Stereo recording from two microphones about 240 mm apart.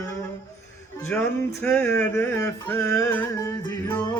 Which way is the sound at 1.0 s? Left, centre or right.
Centre.